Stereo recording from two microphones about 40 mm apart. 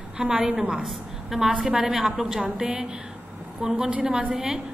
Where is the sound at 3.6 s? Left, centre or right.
Right.